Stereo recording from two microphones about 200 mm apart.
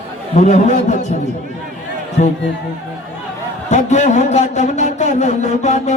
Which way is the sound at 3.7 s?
35° left (ahead or behind).